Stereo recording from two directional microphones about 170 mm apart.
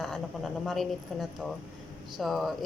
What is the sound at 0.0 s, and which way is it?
A woman's voice, centre (ahead or behind).